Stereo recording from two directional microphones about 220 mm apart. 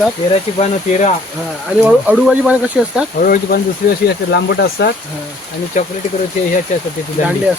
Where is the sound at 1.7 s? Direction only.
Centre (ahead or behind).